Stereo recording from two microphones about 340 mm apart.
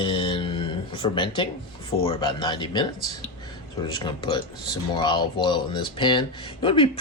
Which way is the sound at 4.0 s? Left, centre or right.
Centre.